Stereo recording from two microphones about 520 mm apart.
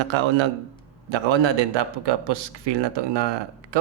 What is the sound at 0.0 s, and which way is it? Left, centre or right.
Speech, right.